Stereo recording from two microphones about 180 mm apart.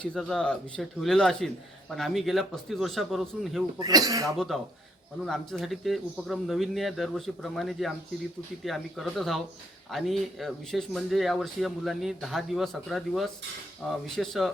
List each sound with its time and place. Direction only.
0.0 s speech: 5° left (ahead or behind)
3.8 s speech: 20° right (ahead or behind)
4.4 s speech: centre (ahead or behind)